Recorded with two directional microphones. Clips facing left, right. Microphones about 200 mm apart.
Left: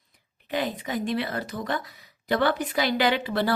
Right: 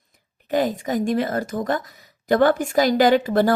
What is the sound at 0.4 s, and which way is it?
A woman's voice, 45° right (ahead or behind).